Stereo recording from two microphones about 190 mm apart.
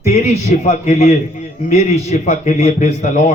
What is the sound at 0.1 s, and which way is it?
A man's voice, 35° left (ahead or behind).